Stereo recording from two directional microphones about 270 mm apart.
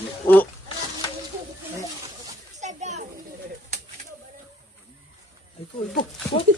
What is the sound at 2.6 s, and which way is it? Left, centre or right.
Children playing, right.